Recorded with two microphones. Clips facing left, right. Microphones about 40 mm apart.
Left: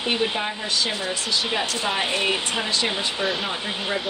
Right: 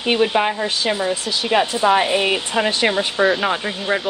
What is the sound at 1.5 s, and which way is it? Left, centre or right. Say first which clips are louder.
Speech: right 9 dB; right.